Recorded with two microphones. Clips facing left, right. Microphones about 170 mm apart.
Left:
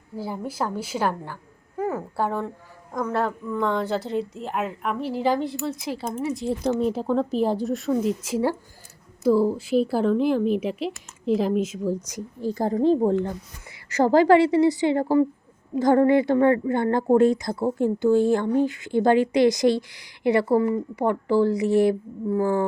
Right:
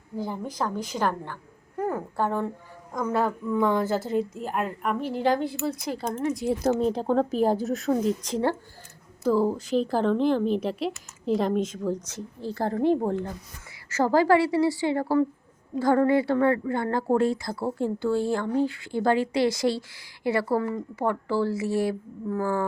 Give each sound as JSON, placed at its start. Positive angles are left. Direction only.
{"t": 0.2, "sound": "speech", "side_deg": 5}
{"t": 7.0, "sound": "speech", "side_deg": -35}
{"t": 7.5, "sound": "speech", "side_deg": 0}